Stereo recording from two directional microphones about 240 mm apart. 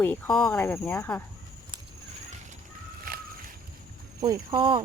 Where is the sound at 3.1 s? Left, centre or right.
Right.